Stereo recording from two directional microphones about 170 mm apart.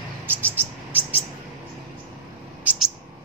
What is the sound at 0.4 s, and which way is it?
Bird, 10° right (ahead or behind).